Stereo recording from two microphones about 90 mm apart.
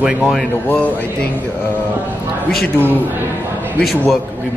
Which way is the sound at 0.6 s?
15° left (ahead or behind).